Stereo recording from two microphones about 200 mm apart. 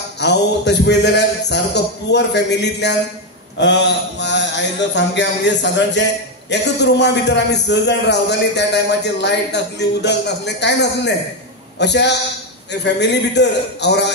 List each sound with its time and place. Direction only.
0.2 s a man's voice: 60° left (ahead or behind)